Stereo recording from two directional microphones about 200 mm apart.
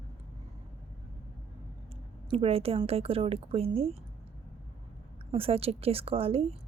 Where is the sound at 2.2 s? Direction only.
30° right (ahead or behind).